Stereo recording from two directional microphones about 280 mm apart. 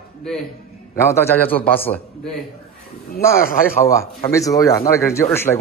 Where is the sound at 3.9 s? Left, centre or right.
Centre.